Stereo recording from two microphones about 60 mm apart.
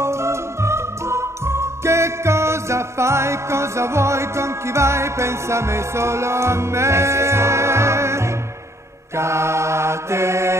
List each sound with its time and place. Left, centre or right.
0.0 s music: right
9.1 s mantra: right